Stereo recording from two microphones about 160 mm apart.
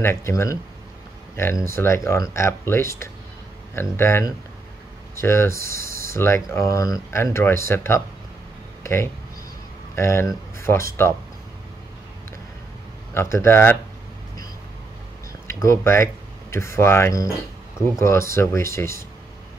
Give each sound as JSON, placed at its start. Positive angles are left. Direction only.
{"t": 0.0, "sound": "speech", "side_deg": 15}
{"t": 13.1, "sound": "speech", "side_deg": 15}
{"t": 15.4, "sound": "speech", "side_deg": 15}